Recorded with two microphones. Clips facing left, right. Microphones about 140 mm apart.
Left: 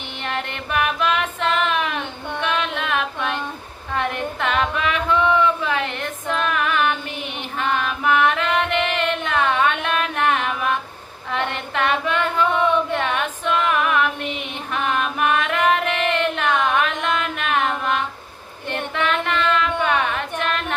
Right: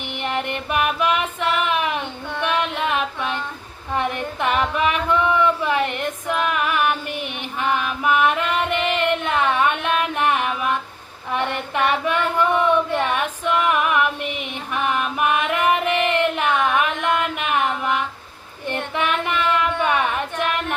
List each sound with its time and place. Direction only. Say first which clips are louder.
0.2 s female singing: right 3 dB; 15° right (ahead or behind)
3.9 s a sound: even; 15° right (ahead or behind)
7.6 s music: even; 15° right (ahead or behind)
11.3 s female singing: right 1 dB; 15° right (ahead or behind)
16.7 s music: right 1 dB; 15° right (ahead or behind)
18.9 s a sound: left 1 dB; 15° right (ahead or behind)